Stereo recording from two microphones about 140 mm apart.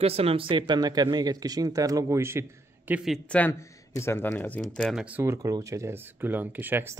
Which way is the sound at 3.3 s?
10° left (ahead or behind).